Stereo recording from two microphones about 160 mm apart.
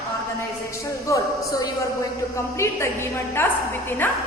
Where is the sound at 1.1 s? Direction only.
20° left (ahead or behind).